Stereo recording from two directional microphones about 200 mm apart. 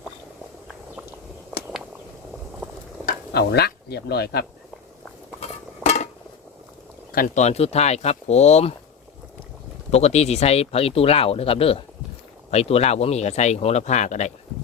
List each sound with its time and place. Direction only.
3.1 s speech: 55° left (ahead or behind)
5.4 s a sound: 35° left (ahead or behind)
7.1 s speech: 40° left (ahead or behind)
9.9 s speech: 30° left (ahead or behind)